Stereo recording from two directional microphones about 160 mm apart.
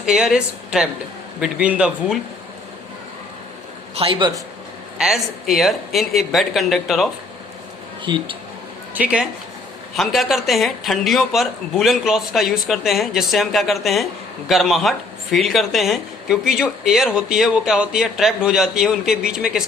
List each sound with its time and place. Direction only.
0.0 s speech: 5° right (ahead or behind)
3.9 s a man's voice: 35° right (ahead or behind)
4.9 s speech: centre (ahead or behind)
8.0 s speech: 30° right (ahead or behind)
9.9 s speech: centre (ahead or behind)